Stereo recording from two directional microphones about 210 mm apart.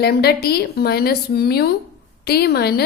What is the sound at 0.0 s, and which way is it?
A woman's voice, 50° left (ahead or behind).